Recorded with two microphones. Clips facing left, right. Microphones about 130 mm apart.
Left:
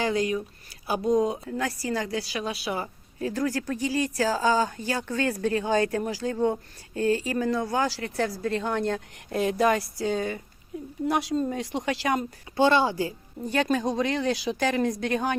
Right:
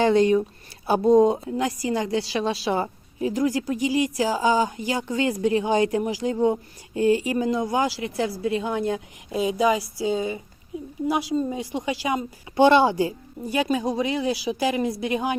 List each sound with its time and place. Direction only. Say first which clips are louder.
0.0 s a woman's voice: right 8 dB; 30° right (ahead or behind)
3.2 s speech: right 4 dB; 15° right (ahead or behind)
12.5 s a woman's voice: right 5 dB; 20° right (ahead or behind)
13.5 s speech: right 1 dB; 10° right (ahead or behind)